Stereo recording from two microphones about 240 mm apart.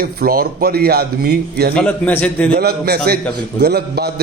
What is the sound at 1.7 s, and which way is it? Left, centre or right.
Speech, centre.